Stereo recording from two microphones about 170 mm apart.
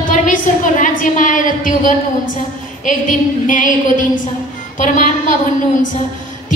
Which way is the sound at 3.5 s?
50° left (ahead or behind).